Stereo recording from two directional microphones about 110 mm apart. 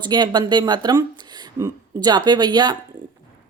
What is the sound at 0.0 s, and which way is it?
A woman's voice, 40° right (ahead or behind).